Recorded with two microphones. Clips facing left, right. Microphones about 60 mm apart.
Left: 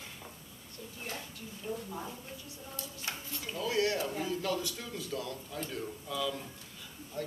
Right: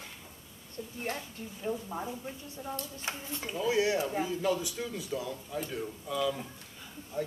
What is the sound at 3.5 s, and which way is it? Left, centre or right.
Speech, centre.